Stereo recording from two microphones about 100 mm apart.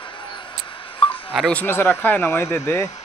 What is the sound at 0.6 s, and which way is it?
Telephone dialing, 60° left (ahead or behind).